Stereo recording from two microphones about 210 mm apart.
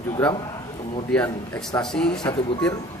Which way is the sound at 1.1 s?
5° left (ahead or behind).